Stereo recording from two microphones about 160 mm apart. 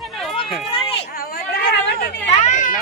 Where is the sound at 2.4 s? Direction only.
50° left (ahead or behind).